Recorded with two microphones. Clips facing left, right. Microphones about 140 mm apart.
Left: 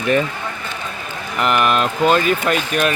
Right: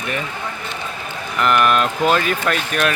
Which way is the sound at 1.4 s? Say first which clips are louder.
Right 1 dB; 5° left (ahead or behind).